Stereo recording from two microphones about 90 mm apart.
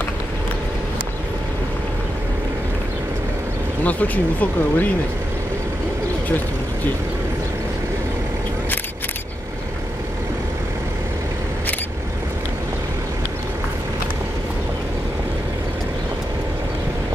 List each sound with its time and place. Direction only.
3.8 s speech: 15° left (ahead or behind)